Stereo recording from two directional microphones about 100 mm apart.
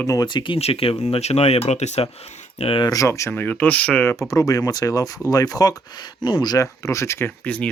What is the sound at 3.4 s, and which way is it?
Speech, 20° left (ahead or behind).